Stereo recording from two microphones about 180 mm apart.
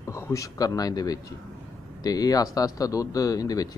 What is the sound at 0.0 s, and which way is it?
A man's voice, 15° left (ahead or behind).